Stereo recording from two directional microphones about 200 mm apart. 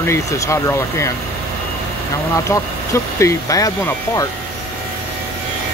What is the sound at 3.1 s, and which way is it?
Speech, 15° left (ahead or behind).